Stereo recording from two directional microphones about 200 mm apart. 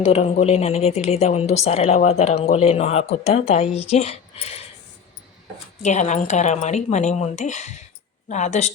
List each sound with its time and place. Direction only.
0.0 s a woman's voice: 30° left (ahead or behind)
5.8 s a woman's voice: 35° left (ahead or behind)